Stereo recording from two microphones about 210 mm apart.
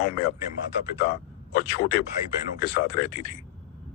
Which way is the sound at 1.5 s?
45° left (ahead or behind).